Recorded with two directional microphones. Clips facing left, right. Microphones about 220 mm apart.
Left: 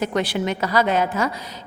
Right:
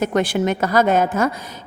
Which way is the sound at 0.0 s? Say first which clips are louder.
Right 4 dB; 50° right (ahead or behind).